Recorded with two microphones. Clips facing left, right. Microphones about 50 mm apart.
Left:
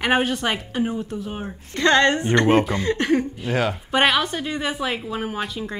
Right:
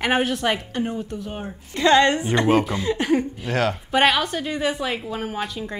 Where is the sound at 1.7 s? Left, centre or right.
Centre.